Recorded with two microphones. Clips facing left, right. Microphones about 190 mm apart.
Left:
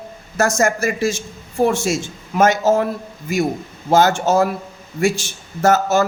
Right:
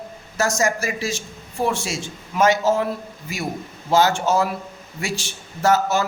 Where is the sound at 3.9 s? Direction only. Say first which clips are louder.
Left 3 dB; 50° left (ahead or behind).